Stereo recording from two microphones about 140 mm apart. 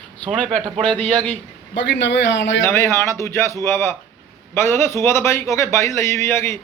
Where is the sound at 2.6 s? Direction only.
20° left (ahead or behind).